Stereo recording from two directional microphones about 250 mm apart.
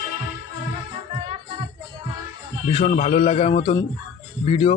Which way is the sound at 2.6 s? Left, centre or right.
Left.